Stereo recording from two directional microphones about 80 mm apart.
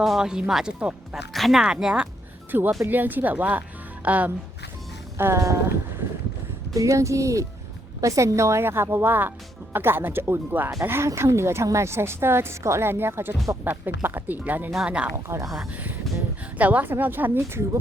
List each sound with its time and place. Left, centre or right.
0.0 s speech: centre
1.3 s speech: centre
1.6 s speech: centre
2.5 s speech: right
5.1 s a woman's voice: right
6.7 s a woman's voice: right; by 15.1 s centre
15.1 s a woman's voice: right
16.6 s speech: centre